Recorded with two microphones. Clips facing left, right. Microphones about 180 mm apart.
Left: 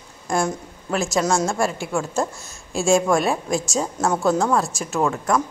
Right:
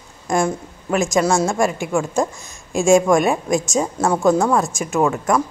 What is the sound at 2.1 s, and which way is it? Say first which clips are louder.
Speech: right 3 dB; 15° right (ahead or behind).